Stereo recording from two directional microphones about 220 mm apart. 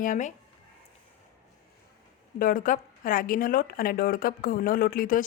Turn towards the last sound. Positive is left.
turn(degrees=40)  # may be behind; listen again after turning